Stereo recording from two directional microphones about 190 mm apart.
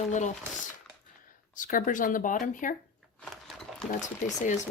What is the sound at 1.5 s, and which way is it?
Speech, 45° left (ahead or behind).